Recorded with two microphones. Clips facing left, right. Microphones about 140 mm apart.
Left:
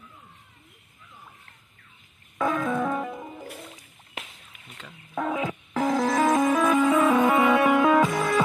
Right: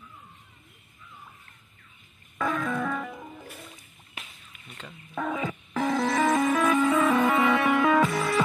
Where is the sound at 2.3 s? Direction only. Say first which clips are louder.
Left 3 dB; 15° left (ahead or behind).